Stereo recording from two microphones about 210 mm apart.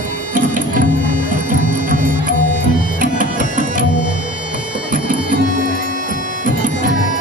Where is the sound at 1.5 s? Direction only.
40° right (ahead or behind).